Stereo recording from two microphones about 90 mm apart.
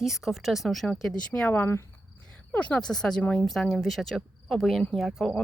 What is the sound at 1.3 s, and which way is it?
A woman's voice, 20° left (ahead or behind).